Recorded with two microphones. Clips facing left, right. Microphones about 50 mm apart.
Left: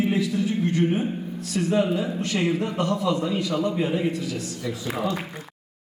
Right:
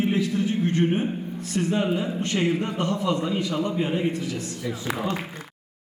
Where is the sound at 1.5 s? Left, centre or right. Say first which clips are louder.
Left 2 dB; right.